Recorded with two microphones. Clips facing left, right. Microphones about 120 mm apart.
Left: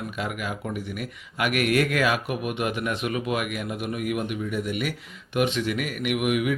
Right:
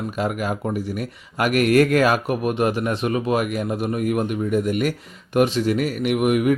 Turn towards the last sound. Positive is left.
turn(degrees=-45)  # may be behind; listen again after turning